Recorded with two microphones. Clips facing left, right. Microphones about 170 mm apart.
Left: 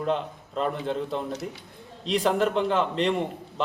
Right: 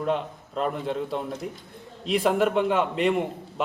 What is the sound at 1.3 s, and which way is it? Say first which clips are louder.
Speech: even; 75° left (ahead or behind).